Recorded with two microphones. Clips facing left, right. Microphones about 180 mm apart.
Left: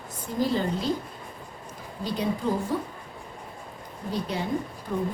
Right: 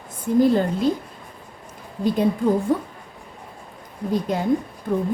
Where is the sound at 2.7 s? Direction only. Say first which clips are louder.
Right 7 dB; 55° right (ahead or behind).